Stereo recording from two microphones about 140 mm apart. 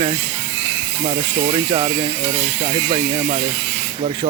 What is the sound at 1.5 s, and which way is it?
Speech, 40° right (ahead or behind).